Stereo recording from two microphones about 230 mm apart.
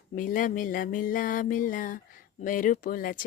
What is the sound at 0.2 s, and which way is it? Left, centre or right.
Music, left.